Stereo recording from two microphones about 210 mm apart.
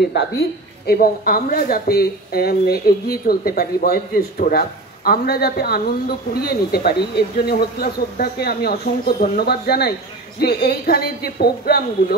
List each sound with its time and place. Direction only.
0.1 s a woman's voice: 50° left (ahead or behind)